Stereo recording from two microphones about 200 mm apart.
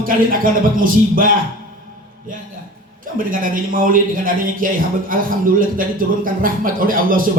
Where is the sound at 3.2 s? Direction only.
45° right (ahead or behind).